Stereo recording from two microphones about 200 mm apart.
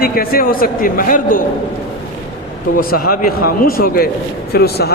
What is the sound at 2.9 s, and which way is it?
A man's voice, 50° left (ahead or behind).